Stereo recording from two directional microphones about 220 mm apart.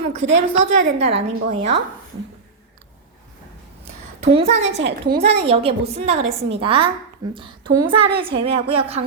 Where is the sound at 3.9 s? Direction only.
30° right (ahead or behind).